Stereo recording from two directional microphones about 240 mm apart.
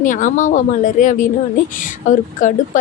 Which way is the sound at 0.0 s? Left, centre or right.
Left.